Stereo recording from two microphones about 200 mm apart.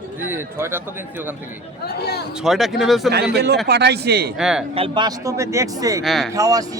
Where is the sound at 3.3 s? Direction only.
55° right (ahead or behind).